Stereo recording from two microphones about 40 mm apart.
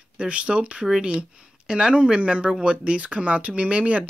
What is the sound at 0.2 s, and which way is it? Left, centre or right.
Speech, right.